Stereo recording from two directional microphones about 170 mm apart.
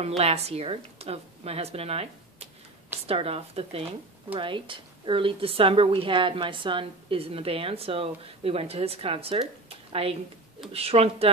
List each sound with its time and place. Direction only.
0.2 s a woman's voice: 35° right (ahead or behind)
9.7 s a sound: 35° right (ahead or behind)
10.7 s a woman's voice: 35° right (ahead or behind)